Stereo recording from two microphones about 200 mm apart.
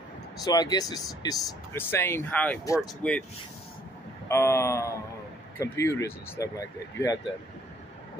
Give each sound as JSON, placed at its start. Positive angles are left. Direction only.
{"t": 0.4, "sound": "speech", "side_deg": 20}
{"t": 4.3, "sound": "speech", "side_deg": 15}